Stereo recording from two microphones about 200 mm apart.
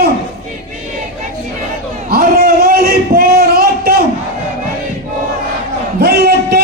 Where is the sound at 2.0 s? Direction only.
45° right (ahead or behind).